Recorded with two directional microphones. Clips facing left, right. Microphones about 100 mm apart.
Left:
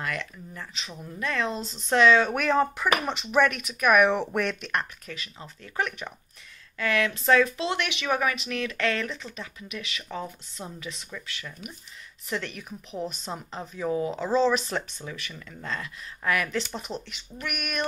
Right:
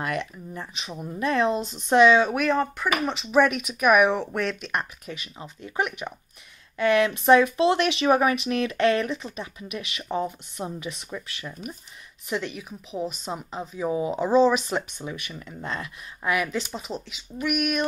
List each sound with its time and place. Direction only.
0.0 s a woman's voice: 25° right (ahead or behind)
2.4 s a woman's voice: centre (ahead or behind)
6.8 s speech: 25° right (ahead or behind)
12.3 s a woman's voice: 10° right (ahead or behind)
16.7 s speech: centre (ahead or behind)